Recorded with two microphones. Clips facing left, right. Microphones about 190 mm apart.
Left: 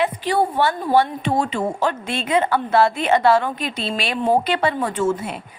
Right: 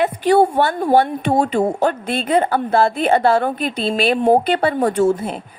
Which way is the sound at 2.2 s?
35° right (ahead or behind).